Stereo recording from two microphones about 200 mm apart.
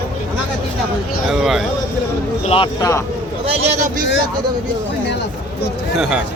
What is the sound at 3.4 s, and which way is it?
Speech, 30° right (ahead or behind).